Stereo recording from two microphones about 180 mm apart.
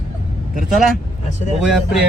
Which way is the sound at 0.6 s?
Centre (ahead or behind).